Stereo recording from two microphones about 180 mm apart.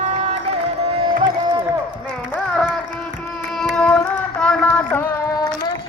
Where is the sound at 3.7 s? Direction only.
5° left (ahead or behind).